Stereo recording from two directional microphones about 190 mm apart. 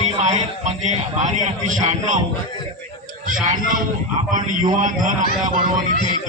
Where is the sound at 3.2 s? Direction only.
40° right (ahead or behind).